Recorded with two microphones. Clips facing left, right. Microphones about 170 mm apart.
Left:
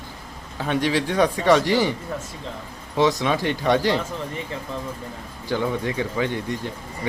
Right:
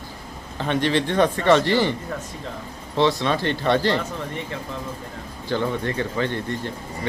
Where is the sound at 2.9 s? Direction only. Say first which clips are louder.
Even; 15° left (ahead or behind).